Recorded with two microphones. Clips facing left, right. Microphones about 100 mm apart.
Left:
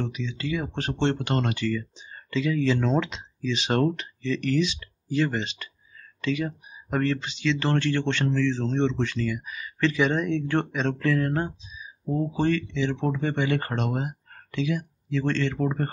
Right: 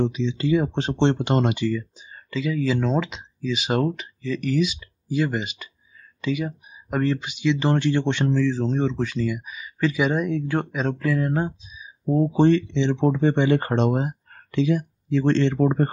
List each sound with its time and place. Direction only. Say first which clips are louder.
0.0 s speech: right 8 dB; 25° right (ahead or behind)
2.0 s speech: left 1 dB; 5° right (ahead or behind)
12.1 s speech: right 7 dB; 25° right (ahead or behind)